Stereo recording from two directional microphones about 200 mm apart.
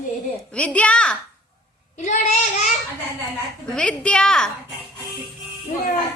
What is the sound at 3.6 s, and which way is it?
Speech, 5° left (ahead or behind).